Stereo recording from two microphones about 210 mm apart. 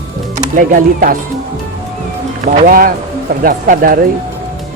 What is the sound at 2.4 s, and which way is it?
Speech, 35° right (ahead or behind).